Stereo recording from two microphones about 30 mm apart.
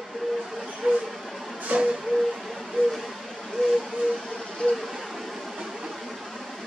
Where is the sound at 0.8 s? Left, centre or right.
Right.